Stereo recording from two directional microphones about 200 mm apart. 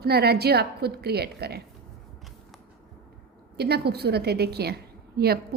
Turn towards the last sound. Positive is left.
turn(degrees=-50)  # may be behind; listen again after turning